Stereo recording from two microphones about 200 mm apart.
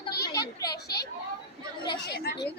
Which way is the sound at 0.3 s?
20° left (ahead or behind).